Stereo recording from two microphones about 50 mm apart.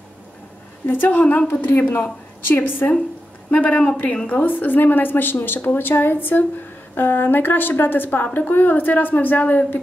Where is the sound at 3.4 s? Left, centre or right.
Left.